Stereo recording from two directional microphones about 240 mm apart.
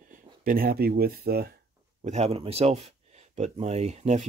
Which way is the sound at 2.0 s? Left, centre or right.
Right.